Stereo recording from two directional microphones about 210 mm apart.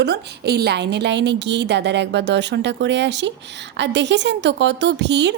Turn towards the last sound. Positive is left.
turn(degrees=-55)  # may be behind; listen again after turning